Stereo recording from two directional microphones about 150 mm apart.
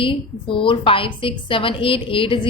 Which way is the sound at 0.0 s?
35° left (ahead or behind).